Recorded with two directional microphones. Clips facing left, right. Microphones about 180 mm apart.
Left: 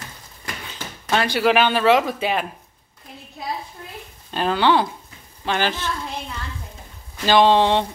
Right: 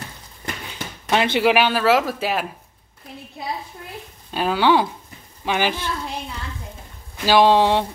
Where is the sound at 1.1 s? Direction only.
20° right (ahead or behind).